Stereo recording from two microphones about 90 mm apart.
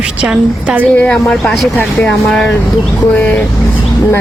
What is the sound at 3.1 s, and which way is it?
Speech, 15° left (ahead or behind).